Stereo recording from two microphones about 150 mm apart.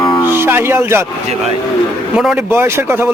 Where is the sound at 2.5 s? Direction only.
15° right (ahead or behind).